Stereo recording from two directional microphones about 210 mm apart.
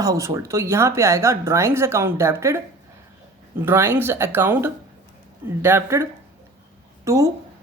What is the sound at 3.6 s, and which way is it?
Speech, 10° right (ahead or behind).